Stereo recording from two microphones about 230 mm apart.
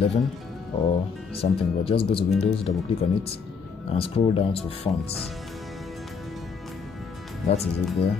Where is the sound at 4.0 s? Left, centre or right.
Left.